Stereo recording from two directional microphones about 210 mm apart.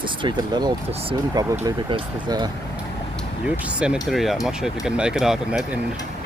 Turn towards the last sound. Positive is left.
turn(degrees=-5)  # may be behind; listen again after turning